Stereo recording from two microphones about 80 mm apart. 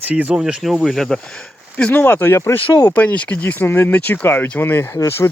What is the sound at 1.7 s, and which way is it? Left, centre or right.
Speech, centre.